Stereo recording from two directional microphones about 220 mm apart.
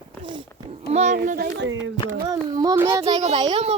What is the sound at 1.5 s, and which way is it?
Music, 55° right (ahead or behind).